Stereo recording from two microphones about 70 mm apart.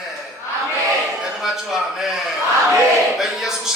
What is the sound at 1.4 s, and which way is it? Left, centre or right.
Speech, centre.